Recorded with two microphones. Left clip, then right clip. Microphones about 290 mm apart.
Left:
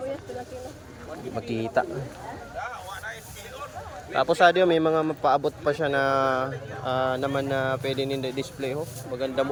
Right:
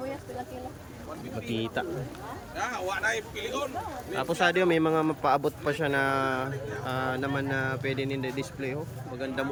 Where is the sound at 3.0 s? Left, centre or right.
Right.